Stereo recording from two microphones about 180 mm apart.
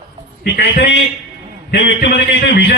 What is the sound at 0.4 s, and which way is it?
A man's voice, 65° left (ahead or behind).